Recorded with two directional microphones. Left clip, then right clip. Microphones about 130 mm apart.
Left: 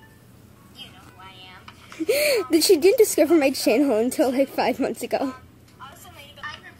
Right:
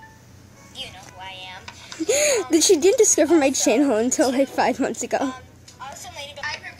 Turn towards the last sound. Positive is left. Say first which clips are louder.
# right 6 dB
turn(degrees=-45)  # may be behind; listen again after turning